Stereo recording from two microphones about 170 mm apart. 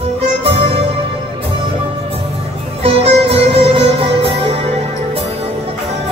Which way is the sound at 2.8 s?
35° right (ahead or behind).